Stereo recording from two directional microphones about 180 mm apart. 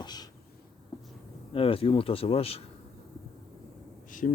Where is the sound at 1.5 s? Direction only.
30° left (ahead or behind).